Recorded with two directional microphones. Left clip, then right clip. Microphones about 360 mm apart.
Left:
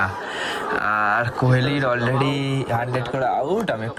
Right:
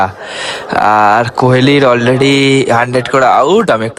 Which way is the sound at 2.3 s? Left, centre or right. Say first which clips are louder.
Right 15 dB; right.